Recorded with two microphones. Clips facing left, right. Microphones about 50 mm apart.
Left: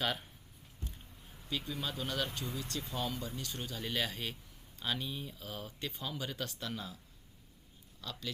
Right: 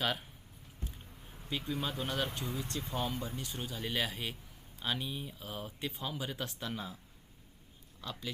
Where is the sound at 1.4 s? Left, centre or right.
Centre.